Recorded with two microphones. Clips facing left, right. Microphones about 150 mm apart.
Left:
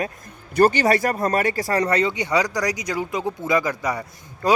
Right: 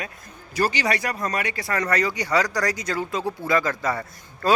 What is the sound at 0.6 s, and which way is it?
Speech, 55° left (ahead or behind).